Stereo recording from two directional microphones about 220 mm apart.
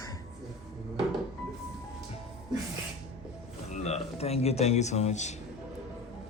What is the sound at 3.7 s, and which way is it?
Speech, 30° left (ahead or behind).